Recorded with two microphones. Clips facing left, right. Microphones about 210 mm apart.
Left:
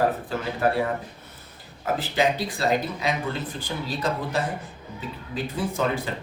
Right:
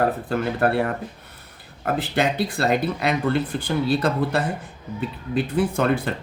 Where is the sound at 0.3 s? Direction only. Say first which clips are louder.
Right 3 dB; 55° right (ahead or behind).